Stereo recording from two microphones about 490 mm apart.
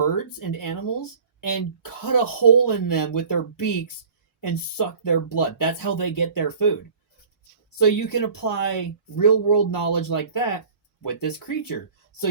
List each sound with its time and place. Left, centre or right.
0.0 s speech: left
7.8 s speech: left